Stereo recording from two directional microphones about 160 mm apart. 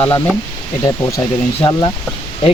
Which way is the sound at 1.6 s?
25° left (ahead or behind).